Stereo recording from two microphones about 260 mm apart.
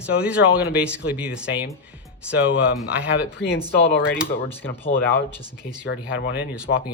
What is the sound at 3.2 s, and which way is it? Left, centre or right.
Speech, left.